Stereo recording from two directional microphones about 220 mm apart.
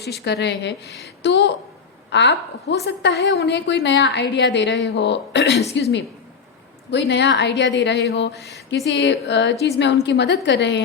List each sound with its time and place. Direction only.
0.0 s a woman's voice: 50° left (ahead or behind)
8.4 s a sound: centre (ahead or behind)
8.9 s a woman's voice: 55° left (ahead or behind)